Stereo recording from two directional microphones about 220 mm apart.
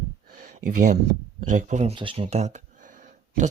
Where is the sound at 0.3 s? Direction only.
35° right (ahead or behind).